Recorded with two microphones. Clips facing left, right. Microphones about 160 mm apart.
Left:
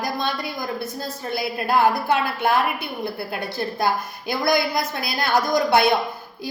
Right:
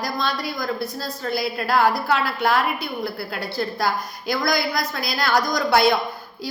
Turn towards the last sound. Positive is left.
turn(degrees=20)  # may be behind; listen again after turning